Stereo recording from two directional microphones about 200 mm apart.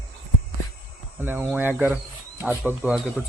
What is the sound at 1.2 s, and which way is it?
Speech, 10° right (ahead or behind).